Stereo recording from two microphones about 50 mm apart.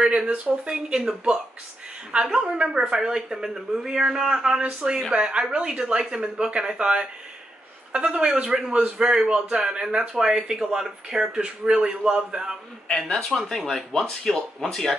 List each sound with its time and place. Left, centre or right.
0.0 s speech: centre
2.1 s a man's voice: centre
12.8 s speech: centre